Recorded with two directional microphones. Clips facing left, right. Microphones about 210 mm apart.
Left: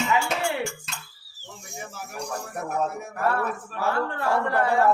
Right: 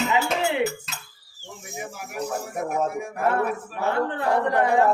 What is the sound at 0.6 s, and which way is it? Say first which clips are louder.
Cough: right 6 dB; 5° right (ahead or behind).